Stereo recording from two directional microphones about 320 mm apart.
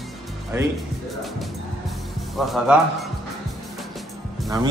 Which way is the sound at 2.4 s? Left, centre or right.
Centre.